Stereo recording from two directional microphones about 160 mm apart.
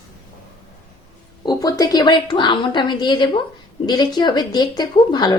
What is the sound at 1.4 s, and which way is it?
A woman's voice, 25° left (ahead or behind).